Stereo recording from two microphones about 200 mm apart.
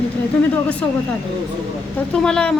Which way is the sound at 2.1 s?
5° left (ahead or behind).